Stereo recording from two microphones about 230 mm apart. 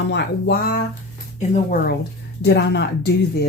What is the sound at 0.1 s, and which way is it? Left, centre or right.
Speech, left.